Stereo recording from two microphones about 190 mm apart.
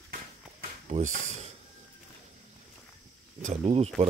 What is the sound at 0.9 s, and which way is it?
Speech, 35° right (ahead or behind).